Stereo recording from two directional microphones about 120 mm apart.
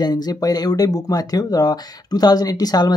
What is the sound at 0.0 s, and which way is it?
Speech, 35° left (ahead or behind).